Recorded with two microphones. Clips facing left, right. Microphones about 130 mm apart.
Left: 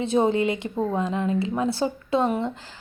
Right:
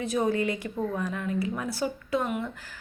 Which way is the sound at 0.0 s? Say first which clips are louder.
Left 5 dB; 25° left (ahead or behind).